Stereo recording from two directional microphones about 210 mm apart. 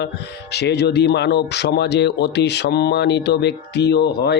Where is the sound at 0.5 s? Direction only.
50° left (ahead or behind).